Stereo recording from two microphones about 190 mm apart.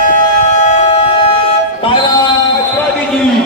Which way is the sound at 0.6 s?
35° left (ahead or behind).